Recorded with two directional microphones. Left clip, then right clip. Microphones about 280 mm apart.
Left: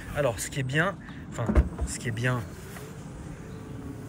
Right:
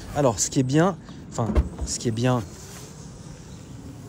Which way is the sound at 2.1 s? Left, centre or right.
Right.